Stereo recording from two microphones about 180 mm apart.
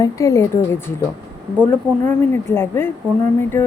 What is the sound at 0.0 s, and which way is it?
Speech, 15° left (ahead or behind).